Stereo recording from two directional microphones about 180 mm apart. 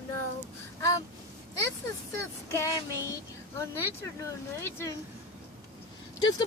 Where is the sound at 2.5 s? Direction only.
15° left (ahead or behind).